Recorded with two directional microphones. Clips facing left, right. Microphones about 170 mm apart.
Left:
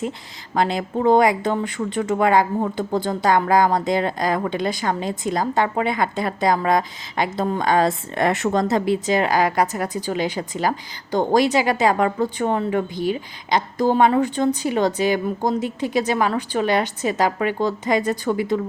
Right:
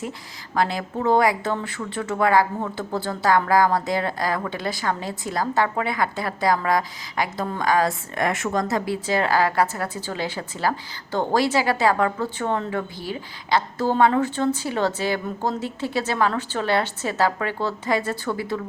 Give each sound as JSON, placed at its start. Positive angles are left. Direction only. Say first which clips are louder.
{"t": 0.5, "sound": "speech", "louder": "left 3 dB", "side_deg": 20}